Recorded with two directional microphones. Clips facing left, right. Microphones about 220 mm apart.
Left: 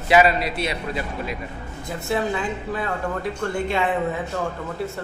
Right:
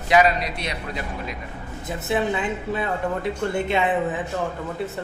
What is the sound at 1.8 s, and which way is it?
Speech, 20° right (ahead or behind).